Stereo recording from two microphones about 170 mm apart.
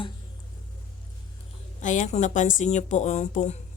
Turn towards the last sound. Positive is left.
turn(degrees=40)  # may be behind; listen again after turning